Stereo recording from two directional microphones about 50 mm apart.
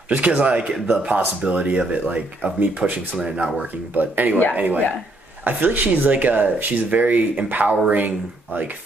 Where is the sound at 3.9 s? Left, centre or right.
Right.